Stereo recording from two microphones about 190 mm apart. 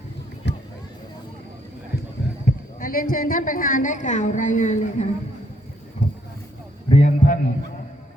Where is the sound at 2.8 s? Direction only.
50° left (ahead or behind).